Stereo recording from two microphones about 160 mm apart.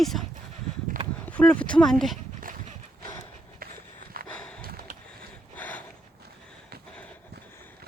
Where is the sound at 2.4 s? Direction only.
55° right (ahead or behind).